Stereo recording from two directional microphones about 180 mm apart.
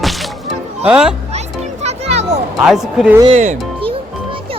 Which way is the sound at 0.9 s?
5° right (ahead or behind).